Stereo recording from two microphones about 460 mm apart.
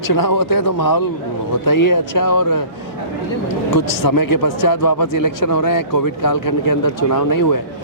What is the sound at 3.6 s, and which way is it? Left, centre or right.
A man's voice, left.